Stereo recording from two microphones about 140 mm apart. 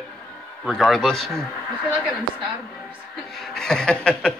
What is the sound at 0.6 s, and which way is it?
Speech, centre (ahead or behind).